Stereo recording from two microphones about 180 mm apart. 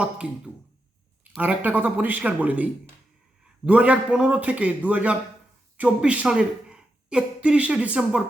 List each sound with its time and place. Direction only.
0.0 s a man's voice: 5° right (ahead or behind)